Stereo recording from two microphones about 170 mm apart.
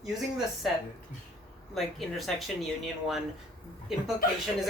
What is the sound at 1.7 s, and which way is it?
Speech, centre (ahead or behind).